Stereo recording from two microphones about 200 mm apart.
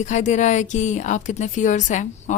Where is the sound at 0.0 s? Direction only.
35° left (ahead or behind).